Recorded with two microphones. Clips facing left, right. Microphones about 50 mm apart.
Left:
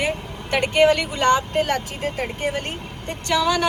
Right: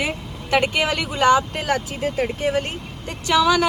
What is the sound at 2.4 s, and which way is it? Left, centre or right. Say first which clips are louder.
Speech: right 3 dB; left.